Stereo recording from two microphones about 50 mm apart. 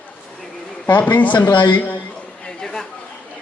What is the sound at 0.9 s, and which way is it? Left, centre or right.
A man's voice, left.